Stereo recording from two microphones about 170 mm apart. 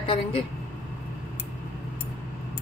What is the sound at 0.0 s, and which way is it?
Speech, 30° left (ahead or behind).